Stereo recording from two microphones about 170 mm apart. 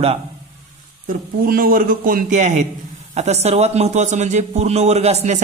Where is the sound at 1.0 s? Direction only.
60° right (ahead or behind).